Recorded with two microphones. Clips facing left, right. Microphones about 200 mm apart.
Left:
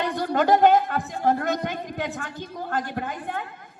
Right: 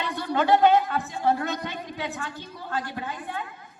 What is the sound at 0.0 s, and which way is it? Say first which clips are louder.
A man's voice: left 3 dB; 45° left (ahead or behind).